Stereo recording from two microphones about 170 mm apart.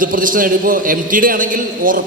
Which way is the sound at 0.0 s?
55° right (ahead or behind).